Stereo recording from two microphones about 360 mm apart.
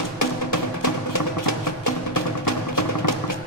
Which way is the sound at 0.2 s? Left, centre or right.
Left.